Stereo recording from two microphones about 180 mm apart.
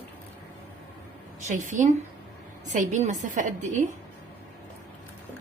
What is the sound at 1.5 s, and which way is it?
A woman's voice, 45° right (ahead or behind).